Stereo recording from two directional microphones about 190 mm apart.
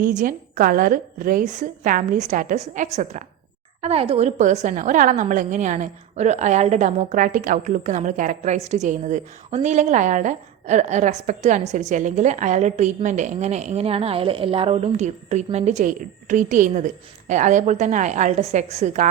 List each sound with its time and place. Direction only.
0.0 s a woman's voice: 45° right (ahead or behind)